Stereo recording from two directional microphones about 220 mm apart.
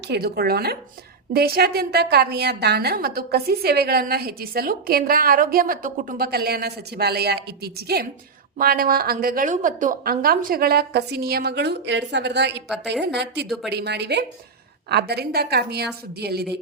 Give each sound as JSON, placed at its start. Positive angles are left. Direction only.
{"t": 0.1, "sound": "a woman's voice", "side_deg": -45}